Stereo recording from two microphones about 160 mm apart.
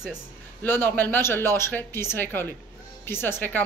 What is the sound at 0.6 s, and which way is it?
A woman's voice, 10° left (ahead or behind).